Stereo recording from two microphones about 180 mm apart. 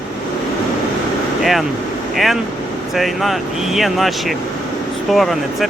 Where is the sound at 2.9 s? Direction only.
Centre (ahead or behind).